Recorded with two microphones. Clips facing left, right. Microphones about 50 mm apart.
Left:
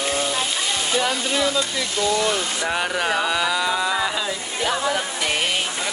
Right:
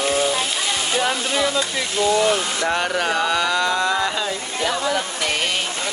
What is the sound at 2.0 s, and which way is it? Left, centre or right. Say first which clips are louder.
Speech: right 3 dB; centre.